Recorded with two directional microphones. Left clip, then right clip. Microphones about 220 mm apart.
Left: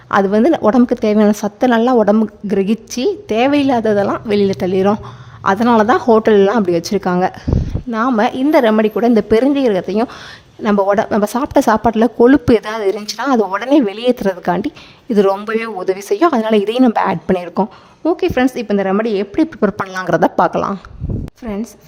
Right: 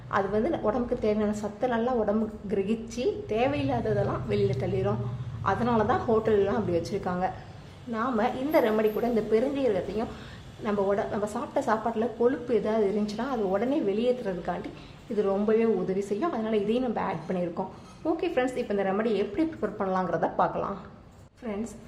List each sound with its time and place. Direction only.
0.1 s a woman's voice: 50° left (ahead or behind)